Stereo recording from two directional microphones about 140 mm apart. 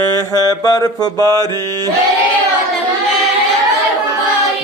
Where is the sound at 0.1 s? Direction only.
25° left (ahead or behind).